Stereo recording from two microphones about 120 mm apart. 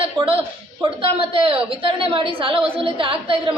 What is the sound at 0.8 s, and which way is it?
A woman's voice, 45° right (ahead or behind).